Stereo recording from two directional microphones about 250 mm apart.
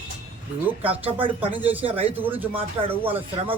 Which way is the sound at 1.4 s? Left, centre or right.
Centre.